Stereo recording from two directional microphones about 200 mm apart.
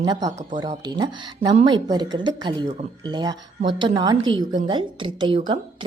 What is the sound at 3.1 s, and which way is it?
A woman's voice, 20° right (ahead or behind).